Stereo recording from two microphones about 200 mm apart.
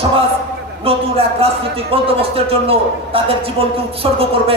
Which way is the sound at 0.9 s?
30° right (ahead or behind).